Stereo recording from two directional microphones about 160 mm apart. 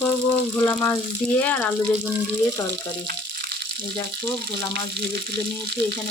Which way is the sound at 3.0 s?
85° right.